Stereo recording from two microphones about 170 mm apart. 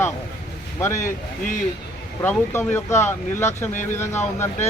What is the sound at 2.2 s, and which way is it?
Speech, 10° left (ahead or behind).